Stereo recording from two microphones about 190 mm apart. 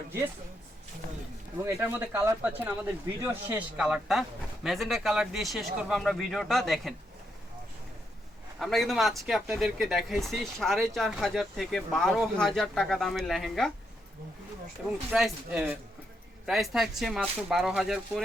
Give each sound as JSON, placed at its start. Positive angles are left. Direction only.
{"t": 1.6, "sound": "speech", "side_deg": -10}
{"t": 8.5, "sound": "speech", "side_deg": 0}
{"t": 15.1, "sound": "speech", "side_deg": -5}